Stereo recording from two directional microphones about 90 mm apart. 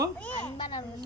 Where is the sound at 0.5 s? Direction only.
75° left (ahead or behind).